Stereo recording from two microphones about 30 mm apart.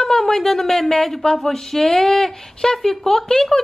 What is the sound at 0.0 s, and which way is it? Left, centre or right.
A woman's voice, centre.